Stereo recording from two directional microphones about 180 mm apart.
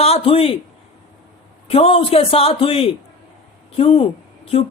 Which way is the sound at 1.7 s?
35° left (ahead or behind).